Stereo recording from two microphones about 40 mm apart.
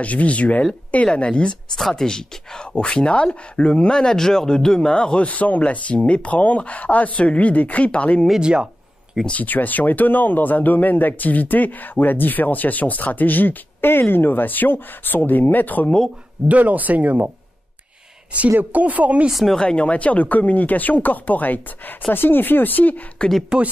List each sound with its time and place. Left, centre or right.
0.0 s speech: left
1.0 s speech: left
1.8 s speech: centre
2.0 s speech: centre
5.2 s speech: left
8.4 s speech: centre
9.3 s speech: left
16.4 s speech: right
18.4 s speech: right
19.5 s speech: centre
19.8 s speech: left
22.1 s speech: left
23.5 s speech: centre